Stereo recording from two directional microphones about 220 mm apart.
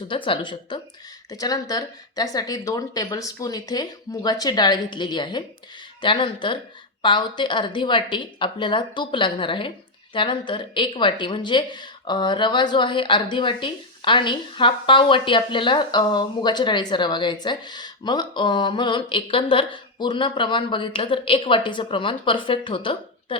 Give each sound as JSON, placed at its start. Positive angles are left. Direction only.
{"t": 0.1, "sound": "a woman's voice", "side_deg": 25}